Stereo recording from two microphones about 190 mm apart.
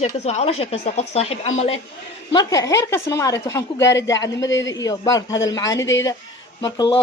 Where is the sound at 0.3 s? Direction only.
35° left (ahead or behind).